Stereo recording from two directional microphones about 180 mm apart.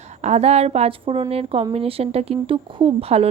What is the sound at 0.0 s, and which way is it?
A woman's voice, 40° right (ahead or behind).